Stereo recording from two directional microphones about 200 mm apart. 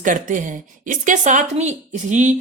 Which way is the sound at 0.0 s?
40° right (ahead or behind).